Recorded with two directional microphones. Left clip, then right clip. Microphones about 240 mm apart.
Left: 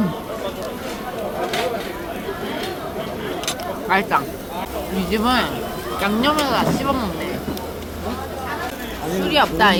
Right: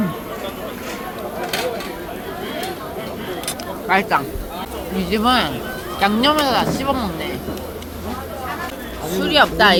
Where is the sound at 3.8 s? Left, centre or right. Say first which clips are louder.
Right 1 dB; centre.